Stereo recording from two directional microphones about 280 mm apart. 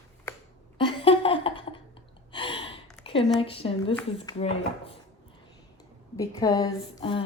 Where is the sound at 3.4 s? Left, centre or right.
Centre.